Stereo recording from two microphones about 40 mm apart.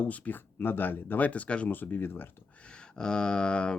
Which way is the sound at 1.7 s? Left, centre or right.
Left.